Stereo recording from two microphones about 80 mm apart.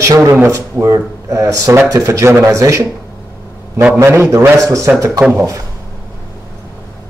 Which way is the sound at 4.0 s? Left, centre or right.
Right.